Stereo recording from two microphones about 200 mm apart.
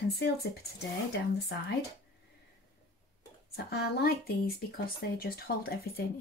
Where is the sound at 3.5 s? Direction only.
50° left (ahead or behind).